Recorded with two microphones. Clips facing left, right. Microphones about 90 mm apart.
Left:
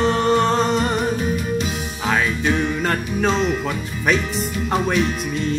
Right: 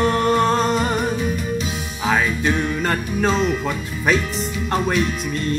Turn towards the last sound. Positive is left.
turn(degrees=0)  # may be behind; listen again after turning